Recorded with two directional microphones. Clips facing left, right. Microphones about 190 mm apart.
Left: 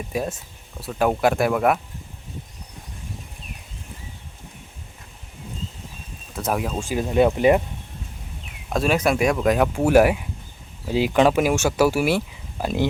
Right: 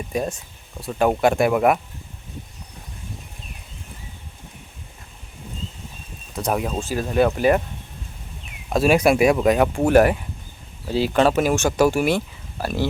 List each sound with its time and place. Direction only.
0.1 s speech: 5° left (ahead or behind)
6.3 s speech: centre (ahead or behind)
6.8 s speech: 15° left (ahead or behind)
8.7 s speech: 10° right (ahead or behind); by 12.6 s 5° left (ahead or behind)
12.6 s speech: 20° left (ahead or behind)